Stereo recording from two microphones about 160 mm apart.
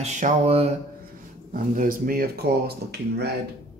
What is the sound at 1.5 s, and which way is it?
Speech, 60° right (ahead or behind).